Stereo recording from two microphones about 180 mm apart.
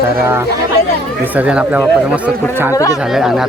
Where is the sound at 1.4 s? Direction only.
5° right (ahead or behind).